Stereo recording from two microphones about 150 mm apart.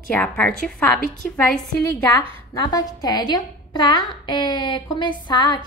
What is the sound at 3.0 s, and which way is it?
A woman's voice, 25° left (ahead or behind).